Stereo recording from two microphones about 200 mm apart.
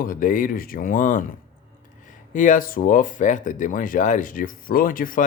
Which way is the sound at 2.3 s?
40° left (ahead or behind).